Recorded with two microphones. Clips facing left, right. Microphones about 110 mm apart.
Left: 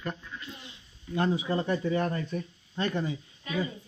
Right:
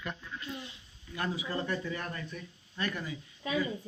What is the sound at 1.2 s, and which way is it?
Speech, 25° left (ahead or behind).